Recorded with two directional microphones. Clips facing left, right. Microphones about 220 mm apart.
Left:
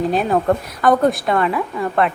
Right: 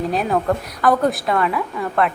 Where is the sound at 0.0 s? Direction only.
Centre (ahead or behind).